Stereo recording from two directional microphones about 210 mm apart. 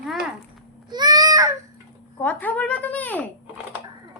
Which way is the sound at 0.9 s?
20° right (ahead or behind).